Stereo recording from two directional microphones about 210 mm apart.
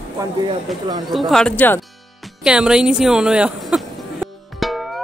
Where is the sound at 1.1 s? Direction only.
Centre (ahead or behind).